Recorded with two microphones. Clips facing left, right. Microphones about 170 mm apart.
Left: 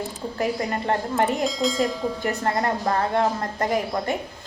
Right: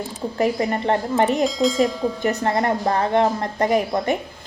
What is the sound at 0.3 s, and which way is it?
Speech, 20° right (ahead or behind).